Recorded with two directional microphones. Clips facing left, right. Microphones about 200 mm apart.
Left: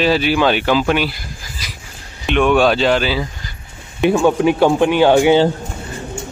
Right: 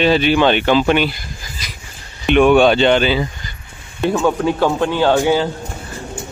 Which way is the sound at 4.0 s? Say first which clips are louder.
Left 3 dB; 15° left (ahead or behind).